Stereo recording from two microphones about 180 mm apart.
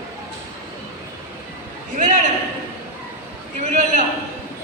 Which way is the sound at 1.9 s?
40° right (ahead or behind).